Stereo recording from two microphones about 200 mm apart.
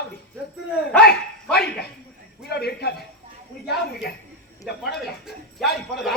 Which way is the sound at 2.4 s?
55° left (ahead or behind).